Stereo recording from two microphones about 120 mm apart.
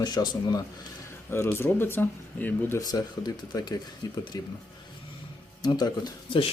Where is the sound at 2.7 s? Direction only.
30° left (ahead or behind).